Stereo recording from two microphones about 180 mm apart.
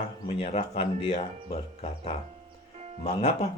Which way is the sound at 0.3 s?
30° left (ahead or behind).